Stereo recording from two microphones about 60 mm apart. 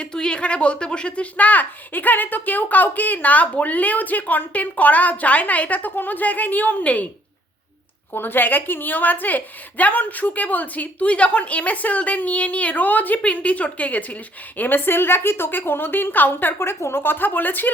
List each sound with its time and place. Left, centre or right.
0.0 s speech: centre
8.1 s a woman's voice: left
16.6 s a woman's voice: left